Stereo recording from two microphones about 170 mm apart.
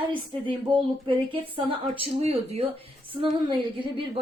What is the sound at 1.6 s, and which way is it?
A woman's voice, 35° right (ahead or behind).